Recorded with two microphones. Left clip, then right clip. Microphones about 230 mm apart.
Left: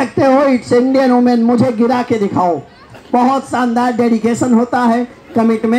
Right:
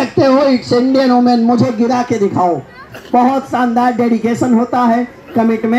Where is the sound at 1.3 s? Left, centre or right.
Left.